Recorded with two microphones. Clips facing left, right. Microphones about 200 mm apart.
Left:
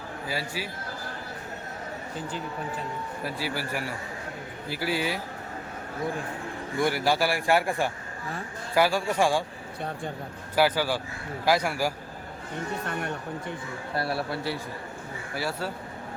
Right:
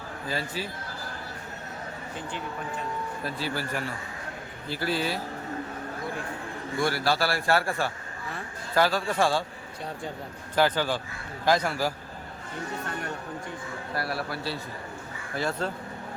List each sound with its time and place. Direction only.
0.3 s a man's voice: 10° left (ahead or behind)
3.2 s a man's voice: 10° left (ahead or behind)
6.8 s a man's voice: 15° left (ahead or behind)
10.5 s a man's voice: 10° left (ahead or behind)
13.9 s a man's voice: 25° left (ahead or behind)
15.4 s a man's voice: 10° left (ahead or behind)